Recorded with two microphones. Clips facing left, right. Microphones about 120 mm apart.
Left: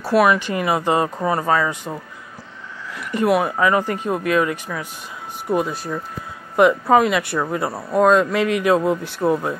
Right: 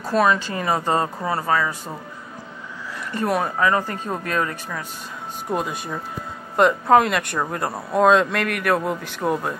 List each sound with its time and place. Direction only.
0.1 s speech: 10° left (ahead or behind)
3.1 s speech: 15° left (ahead or behind)
9.2 s speech: centre (ahead or behind)